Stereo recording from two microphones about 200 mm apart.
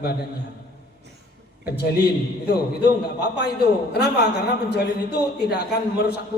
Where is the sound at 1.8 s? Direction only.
55° left (ahead or behind).